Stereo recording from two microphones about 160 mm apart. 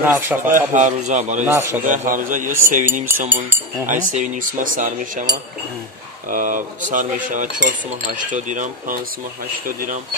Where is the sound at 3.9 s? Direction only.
55° right (ahead or behind).